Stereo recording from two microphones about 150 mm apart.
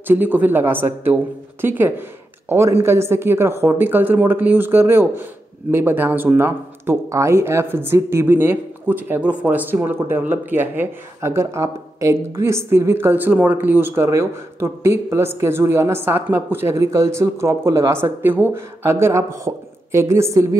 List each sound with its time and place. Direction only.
0.1 s speech: 15° right (ahead or behind)